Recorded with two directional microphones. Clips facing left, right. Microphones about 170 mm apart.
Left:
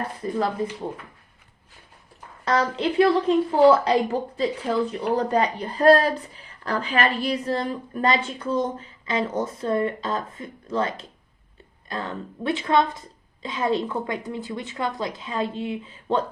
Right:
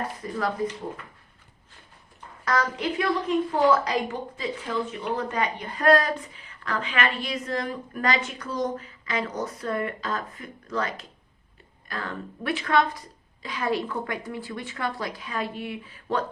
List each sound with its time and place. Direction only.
0.2 s a woman's voice: 25° left (ahead or behind)
2.4 s a woman's voice: 30° left (ahead or behind)